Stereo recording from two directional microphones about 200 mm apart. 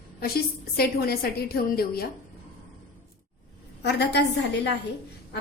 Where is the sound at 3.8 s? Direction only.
60° left (ahead or behind).